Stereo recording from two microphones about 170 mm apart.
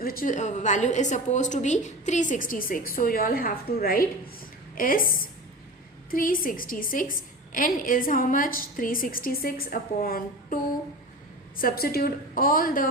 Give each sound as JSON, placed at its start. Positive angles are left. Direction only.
{"t": 0.0, "sound": "a woman's voice", "side_deg": 60}